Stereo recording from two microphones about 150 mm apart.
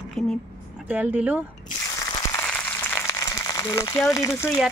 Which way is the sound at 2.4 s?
10° left (ahead or behind).